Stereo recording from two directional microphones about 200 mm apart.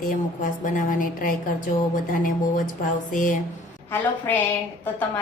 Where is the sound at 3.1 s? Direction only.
40° left (ahead or behind).